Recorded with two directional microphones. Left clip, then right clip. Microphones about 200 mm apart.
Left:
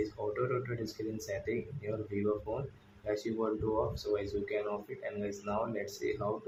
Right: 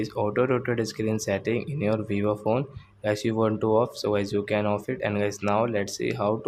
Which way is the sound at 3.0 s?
45° right (ahead or behind).